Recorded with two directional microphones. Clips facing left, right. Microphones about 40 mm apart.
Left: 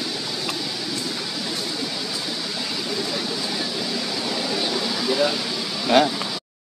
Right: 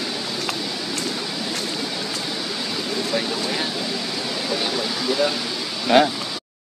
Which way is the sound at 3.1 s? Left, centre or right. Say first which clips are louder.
Right 3 dB; right.